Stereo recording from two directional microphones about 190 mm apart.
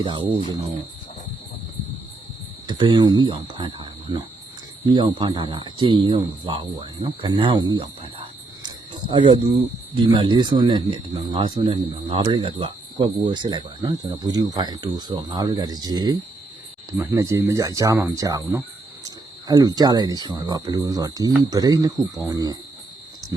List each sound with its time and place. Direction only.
0.0 s speech: 25° right (ahead or behind)
2.6 s speech: 25° right (ahead or behind)
8.6 s cricket: 25° right (ahead or behind)
9.9 s speech: 25° right (ahead or behind)